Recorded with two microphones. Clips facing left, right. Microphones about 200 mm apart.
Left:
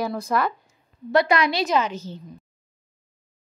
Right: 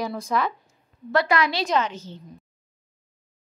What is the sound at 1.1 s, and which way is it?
A woman's voice, 20° left (ahead or behind).